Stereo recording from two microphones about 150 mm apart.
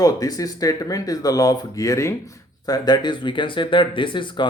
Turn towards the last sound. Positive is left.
turn(degrees=30)  # may be behind; listen again after turning